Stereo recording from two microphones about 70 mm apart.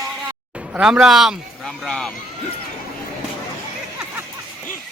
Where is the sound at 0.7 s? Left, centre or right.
Centre.